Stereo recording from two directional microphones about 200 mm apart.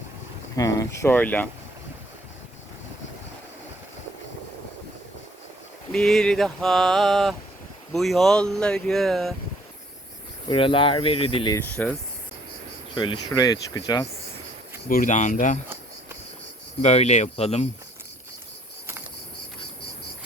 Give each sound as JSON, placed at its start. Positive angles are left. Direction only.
{"t": 0.5, "sound": "speech", "side_deg": 15}
{"t": 5.9, "sound": "a sound", "side_deg": 0}
{"t": 10.5, "sound": "speech", "side_deg": 25}
{"t": 11.5, "sound": "speech", "side_deg": 10}
{"t": 13.0, "sound": "speech", "side_deg": 20}
{"t": 14.8, "sound": "speech", "side_deg": 40}
{"t": 16.8, "sound": "speech", "side_deg": 35}